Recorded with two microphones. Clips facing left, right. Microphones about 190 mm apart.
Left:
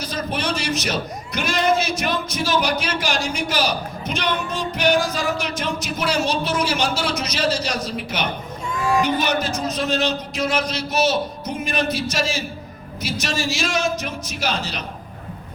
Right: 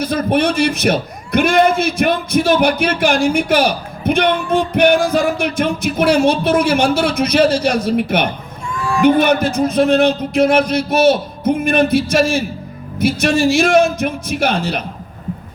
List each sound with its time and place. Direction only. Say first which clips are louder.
0.0 s a man's voice: right 10 dB; 55° right (ahead or behind)
8.7 s a sound: even; 20° left (ahead or behind)
9.0 s a man's voice: right 12 dB; 55° right (ahead or behind)